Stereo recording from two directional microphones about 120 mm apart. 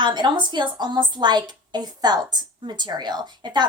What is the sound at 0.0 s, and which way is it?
Speech, 40° right (ahead or behind).